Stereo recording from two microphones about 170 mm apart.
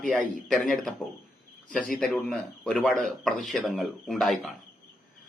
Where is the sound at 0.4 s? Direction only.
Centre (ahead or behind).